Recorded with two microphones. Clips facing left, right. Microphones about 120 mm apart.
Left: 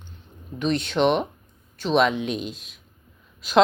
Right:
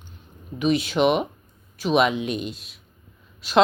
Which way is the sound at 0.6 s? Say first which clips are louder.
Right 1 dB; 5° right (ahead or behind).